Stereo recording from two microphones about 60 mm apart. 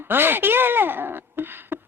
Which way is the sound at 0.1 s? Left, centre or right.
Right.